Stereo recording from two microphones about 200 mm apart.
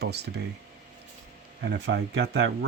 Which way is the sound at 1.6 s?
55° right (ahead or behind).